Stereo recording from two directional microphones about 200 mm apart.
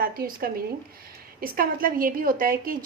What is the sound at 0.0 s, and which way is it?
A woman's voice, 45° right (ahead or behind).